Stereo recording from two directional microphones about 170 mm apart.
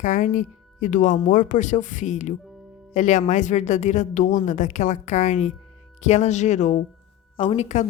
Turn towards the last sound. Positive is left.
turn(degrees=45)  # may be behind; listen again after turning